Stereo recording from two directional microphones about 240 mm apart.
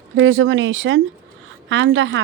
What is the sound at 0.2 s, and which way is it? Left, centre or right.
A woman's voice, right.